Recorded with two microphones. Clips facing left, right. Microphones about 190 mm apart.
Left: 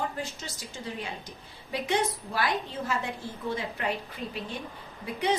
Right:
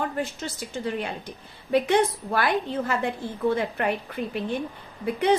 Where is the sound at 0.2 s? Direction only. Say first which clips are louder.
Right 7 dB; 60° right (ahead or behind).